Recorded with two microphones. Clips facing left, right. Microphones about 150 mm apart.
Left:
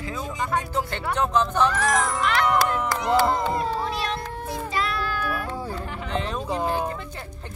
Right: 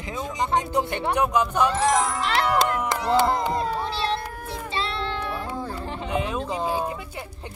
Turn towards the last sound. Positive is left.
turn(degrees=-10)  # may be behind; listen again after turning